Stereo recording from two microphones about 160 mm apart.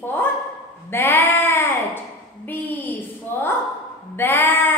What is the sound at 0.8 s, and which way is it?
Sheep, 15° left (ahead or behind).